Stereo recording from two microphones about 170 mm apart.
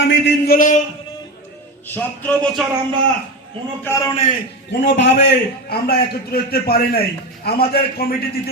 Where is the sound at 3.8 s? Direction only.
20° left (ahead or behind).